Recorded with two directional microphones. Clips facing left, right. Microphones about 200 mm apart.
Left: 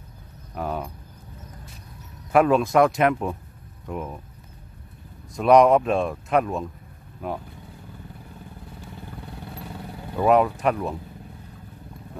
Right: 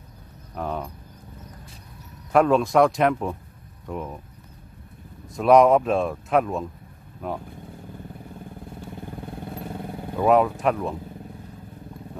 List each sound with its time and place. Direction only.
0.6 s speech: 5° left (ahead or behind)
2.3 s speech: 5° left (ahead or behind)
5.3 s speech: centre (ahead or behind)
9.3 s vehicle: 50° right (ahead or behind)
10.1 s speech: centre (ahead or behind)